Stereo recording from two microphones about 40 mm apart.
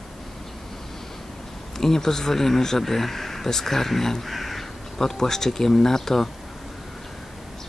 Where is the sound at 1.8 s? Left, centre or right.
Centre.